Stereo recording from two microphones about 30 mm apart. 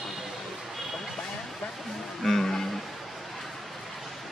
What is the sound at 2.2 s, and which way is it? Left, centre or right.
Music, centre.